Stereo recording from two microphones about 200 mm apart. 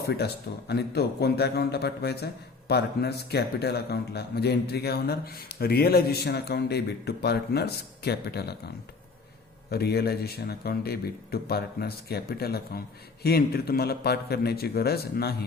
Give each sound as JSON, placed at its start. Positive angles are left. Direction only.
{"t": 0.7, "sound": "a man's voice", "side_deg": 55}